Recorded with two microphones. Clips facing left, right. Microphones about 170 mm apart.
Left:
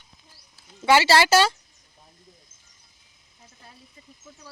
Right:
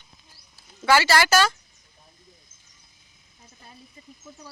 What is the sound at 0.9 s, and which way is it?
Speech, 25° left (ahead or behind).